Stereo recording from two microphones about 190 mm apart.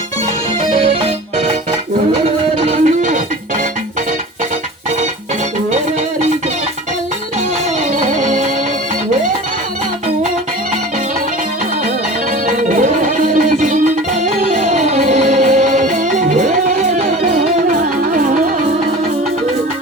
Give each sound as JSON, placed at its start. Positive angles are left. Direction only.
{"t": 0.7, "sound": "music", "side_deg": -35}
{"t": 2.6, "sound": "music", "side_deg": -40}
{"t": 8.0, "sound": "music", "side_deg": -40}
{"t": 12.5, "sound": "music", "side_deg": -40}
{"t": 17.7, "sound": "music", "side_deg": -45}